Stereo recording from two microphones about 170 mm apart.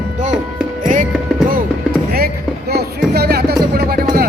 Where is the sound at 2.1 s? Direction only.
65° right (ahead or behind).